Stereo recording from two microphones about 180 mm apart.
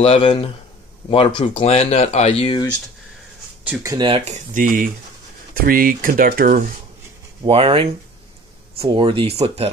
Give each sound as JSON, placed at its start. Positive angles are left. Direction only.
{"t": 0.0, "sound": "speech", "side_deg": 30}
{"t": 3.8, "sound": "speech", "side_deg": -20}
{"t": 4.1, "sound": "speech", "side_deg": -40}
{"t": 7.4, "sound": "speech", "side_deg": -30}